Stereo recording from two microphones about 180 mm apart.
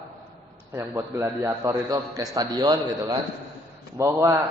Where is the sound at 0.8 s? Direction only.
15° right (ahead or behind).